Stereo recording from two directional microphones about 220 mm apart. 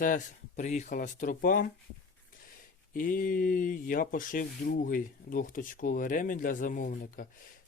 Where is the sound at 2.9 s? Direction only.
40° left (ahead or behind).